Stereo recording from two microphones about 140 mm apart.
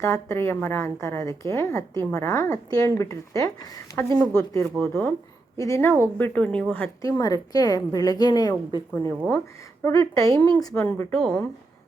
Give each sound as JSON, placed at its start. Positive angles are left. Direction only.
{"t": 0.0, "sound": "a woman's voice", "side_deg": 20}
{"t": 4.8, "sound": "a woman's voice", "side_deg": 10}
{"t": 5.5, "sound": "a woman's voice", "side_deg": 20}
{"t": 7.0, "sound": "a woman's voice", "side_deg": 25}
{"t": 8.9, "sound": "a woman's voice", "side_deg": 10}
{"t": 9.8, "sound": "a woman's voice", "side_deg": 25}
{"t": 10.3, "sound": "a woman's voice", "side_deg": 10}
{"t": 10.6, "sound": "a woman's voice", "side_deg": 25}
{"t": 10.8, "sound": "a woman's voice", "side_deg": 10}